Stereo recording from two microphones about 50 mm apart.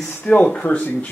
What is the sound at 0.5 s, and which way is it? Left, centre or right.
Speech, left.